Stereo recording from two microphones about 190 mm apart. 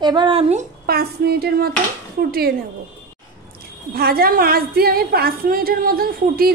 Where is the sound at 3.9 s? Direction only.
50° right (ahead or behind).